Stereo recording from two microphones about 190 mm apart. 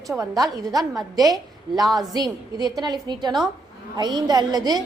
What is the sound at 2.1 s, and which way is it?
A woman's voice, 20° right (ahead or behind).